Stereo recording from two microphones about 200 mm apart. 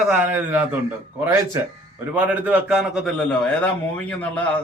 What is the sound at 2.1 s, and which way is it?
A man's voice, 10° right (ahead or behind).